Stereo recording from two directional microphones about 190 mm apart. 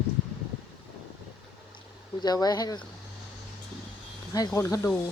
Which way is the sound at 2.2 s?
20° left (ahead or behind).